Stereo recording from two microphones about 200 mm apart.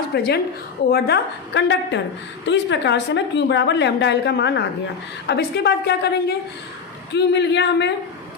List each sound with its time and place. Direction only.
0.1 s a woman's voice: 55° left (ahead or behind)